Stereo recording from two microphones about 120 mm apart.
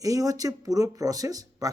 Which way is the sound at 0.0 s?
30° right (ahead or behind).